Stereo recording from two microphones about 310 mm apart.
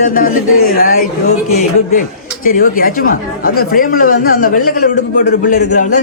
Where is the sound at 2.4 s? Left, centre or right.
Left.